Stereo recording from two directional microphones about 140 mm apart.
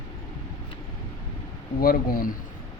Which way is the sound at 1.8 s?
85° left.